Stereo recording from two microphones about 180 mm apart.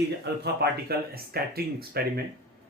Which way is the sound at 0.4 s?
65° right (ahead or behind).